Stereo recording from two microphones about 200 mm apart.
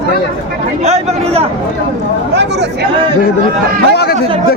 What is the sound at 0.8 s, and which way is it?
Speech, 30° right (ahead or behind).